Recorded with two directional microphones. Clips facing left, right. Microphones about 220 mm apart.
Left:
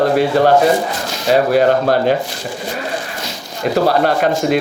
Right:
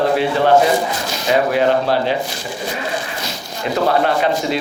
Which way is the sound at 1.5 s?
45° left (ahead or behind).